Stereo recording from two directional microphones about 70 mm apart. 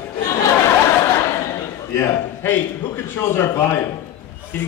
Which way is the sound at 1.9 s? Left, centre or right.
Left.